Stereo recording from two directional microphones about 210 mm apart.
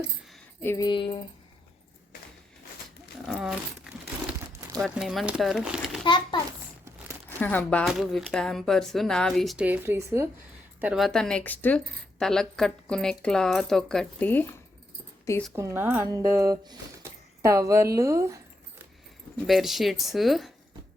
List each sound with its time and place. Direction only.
0.6 s a sound: 15° left (ahead or behind)
3.2 s speech: centre (ahead or behind)
4.8 s speech: centre (ahead or behind)
6.1 s a sound: 20° left (ahead or behind)
7.3 s speech: 10° left (ahead or behind)
15.5 s speech: 10° right (ahead or behind)
19.5 s speech: centre (ahead or behind)